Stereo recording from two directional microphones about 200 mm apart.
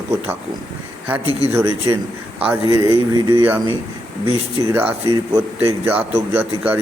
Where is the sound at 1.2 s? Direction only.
30° right (ahead or behind).